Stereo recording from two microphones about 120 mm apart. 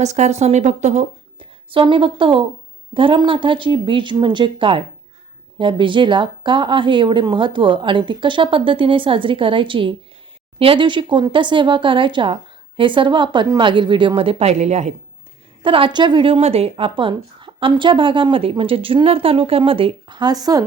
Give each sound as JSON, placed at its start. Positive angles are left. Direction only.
{"t": 0.0, "sound": "speech", "side_deg": -75}
{"t": 1.4, "sound": "a woman's voice", "side_deg": -45}
{"t": 15.6, "sound": "a woman's voice", "side_deg": -45}